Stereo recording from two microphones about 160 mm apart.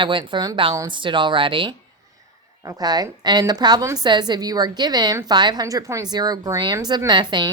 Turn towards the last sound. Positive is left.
turn(degrees=-25)  # may be behind; listen again after turning